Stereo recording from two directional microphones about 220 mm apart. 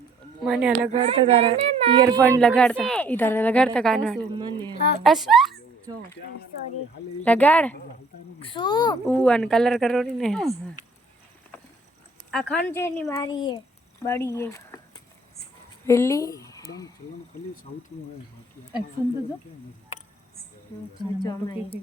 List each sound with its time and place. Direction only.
0.4 s a woman's voice: centre (ahead or behind)
0.9 s speech: 25° right (ahead or behind)
2.4 s a woman's voice: 5° left (ahead or behind)
4.4 s speech: 20° right (ahead or behind)
4.7 s speech: 50° left (ahead or behind)
5.0 s a woman's voice: centre (ahead or behind)
7.2 s speech: 5° left (ahead or behind)
8.4 s a child's voice: 20° left (ahead or behind)
9.0 s a woman's voice: 5° left (ahead or behind)
10.8 s a sound: 35° left (ahead or behind)
12.3 s speech: 5° left (ahead or behind)
15.9 s speech: 15° left (ahead or behind)
21.2 s speech: 20° left (ahead or behind)